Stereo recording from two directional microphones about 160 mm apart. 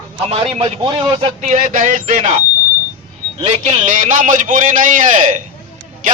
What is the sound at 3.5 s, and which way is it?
A man's voice, 45° right (ahead or behind).